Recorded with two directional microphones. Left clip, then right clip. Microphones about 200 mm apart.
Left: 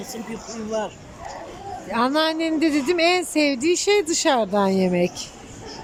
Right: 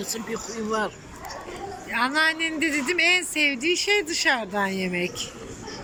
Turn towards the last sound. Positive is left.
turn(degrees=20)  # may be behind; listen again after turning